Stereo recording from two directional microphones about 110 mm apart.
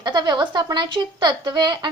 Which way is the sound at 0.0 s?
45° right (ahead or behind).